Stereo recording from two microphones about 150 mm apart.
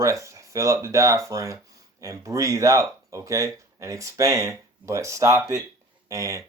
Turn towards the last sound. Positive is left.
turn(degrees=-20)  # may be behind; listen again after turning